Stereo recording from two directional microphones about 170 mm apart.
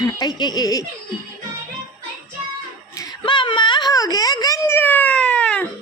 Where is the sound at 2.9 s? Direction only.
25° left (ahead or behind); by 5.7 s 5° left (ahead or behind).